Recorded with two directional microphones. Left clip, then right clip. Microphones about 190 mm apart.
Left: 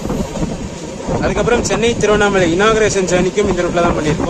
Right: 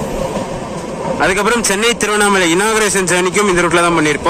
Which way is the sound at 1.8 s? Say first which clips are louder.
Even; 25° right (ahead or behind).